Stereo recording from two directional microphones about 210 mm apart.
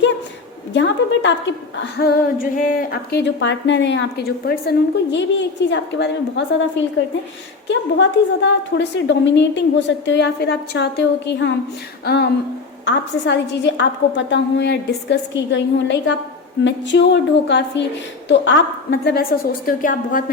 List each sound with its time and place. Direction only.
0.7 s a woman's voice: 60° left (ahead or behind); by 20.2 s 40° left (ahead or behind)